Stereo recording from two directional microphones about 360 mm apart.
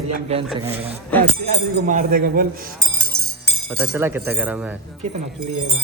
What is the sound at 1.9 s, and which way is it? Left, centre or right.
Speech, right.